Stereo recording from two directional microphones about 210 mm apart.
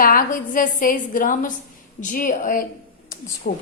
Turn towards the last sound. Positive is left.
turn(degrees=45)  # may be behind; listen again after turning